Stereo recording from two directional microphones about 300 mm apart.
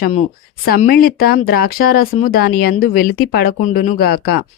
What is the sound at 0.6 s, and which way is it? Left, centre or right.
A woman's voice, left.